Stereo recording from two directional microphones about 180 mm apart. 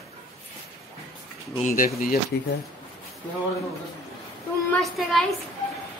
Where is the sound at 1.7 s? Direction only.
50° left (ahead or behind).